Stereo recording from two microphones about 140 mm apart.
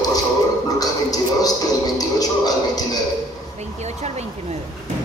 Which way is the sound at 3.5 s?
50° right (ahead or behind).